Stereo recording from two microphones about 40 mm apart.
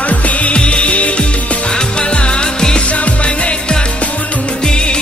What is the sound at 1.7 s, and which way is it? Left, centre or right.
Music, left.